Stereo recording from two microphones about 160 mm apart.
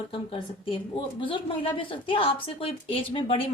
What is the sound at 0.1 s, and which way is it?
A woman's voice, 35° left (ahead or behind).